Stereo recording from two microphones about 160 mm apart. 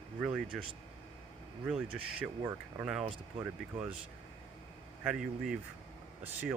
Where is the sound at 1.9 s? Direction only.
5° right (ahead or behind).